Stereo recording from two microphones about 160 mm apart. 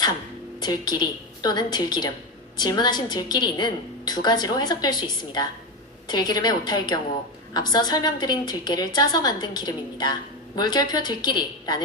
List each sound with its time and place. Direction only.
0.6 s a woman's voice: 25° left (ahead or behind)